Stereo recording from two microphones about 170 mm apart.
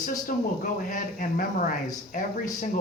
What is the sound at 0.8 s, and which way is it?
Speech, 50° left (ahead or behind).